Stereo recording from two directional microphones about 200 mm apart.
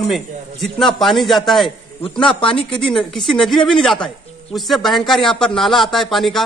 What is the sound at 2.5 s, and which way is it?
Speech, 25° left (ahead or behind).